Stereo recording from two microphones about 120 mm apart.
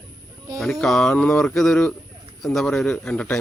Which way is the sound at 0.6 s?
Centre (ahead or behind).